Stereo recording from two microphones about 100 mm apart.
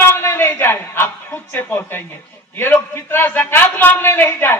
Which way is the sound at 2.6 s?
25° left (ahead or behind).